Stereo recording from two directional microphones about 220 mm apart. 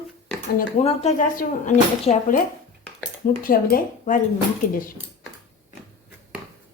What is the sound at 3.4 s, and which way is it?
Speech, 40° left (ahead or behind).